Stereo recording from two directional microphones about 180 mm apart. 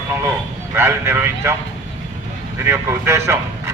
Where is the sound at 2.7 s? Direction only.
15° right (ahead or behind).